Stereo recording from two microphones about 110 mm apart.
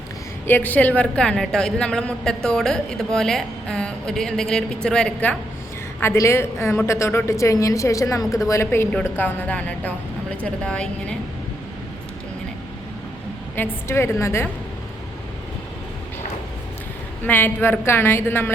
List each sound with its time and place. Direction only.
0.4 s a woman's voice: 15° left (ahead or behind)
6.0 s a man's voice: 25° left (ahead or behind)
13.6 s a man's voice: 20° left (ahead or behind)
17.2 s a man's voice: 20° left (ahead or behind)